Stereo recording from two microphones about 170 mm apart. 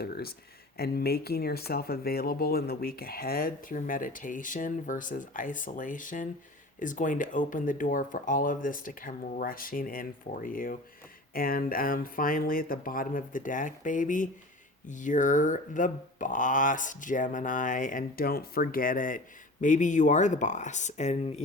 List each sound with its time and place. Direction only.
0.0 s speech: 65° left (ahead or behind); by 21.4 s 40° left (ahead or behind)